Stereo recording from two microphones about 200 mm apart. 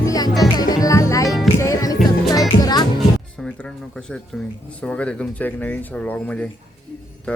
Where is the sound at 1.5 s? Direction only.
15° left (ahead or behind).